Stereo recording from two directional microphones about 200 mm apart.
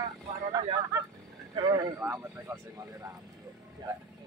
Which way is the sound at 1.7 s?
15° right (ahead or behind).